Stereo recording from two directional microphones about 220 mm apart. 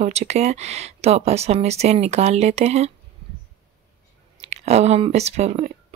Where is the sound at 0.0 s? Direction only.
30° right (ahead or behind).